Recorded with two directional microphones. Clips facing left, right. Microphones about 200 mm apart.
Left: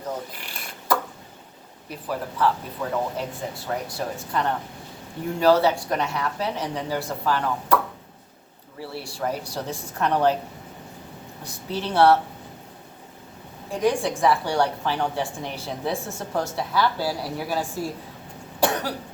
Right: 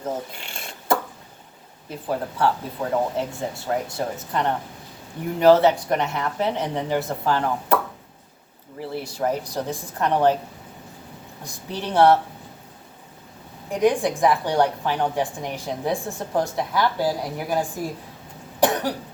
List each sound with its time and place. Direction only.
0.3 s a sound: 25° right (ahead or behind)
1.9 s a woman's voice: 25° right (ahead or behind)
8.8 s a woman's voice: 20° right (ahead or behind)
11.4 s a woman's voice: 15° right (ahead or behind)
13.7 s a woman's voice: 15° right (ahead or behind)
18.6 s cough: 15° right (ahead or behind)